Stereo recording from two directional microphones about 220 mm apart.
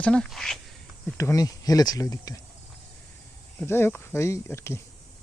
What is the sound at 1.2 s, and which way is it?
Speech, 15° left (ahead or behind).